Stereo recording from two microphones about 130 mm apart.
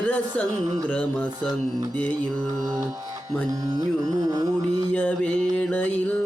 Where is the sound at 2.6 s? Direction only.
25° right (ahead or behind).